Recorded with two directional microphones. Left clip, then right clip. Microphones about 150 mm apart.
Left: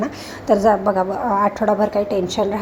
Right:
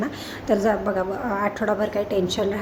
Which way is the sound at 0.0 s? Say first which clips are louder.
Left 4 dB; 20° left (ahead or behind).